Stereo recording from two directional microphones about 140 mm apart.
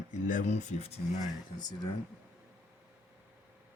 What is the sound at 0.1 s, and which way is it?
Speech, 65° left (ahead or behind).